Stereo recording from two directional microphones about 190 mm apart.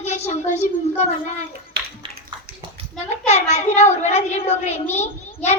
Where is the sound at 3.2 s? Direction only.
35° left (ahead or behind).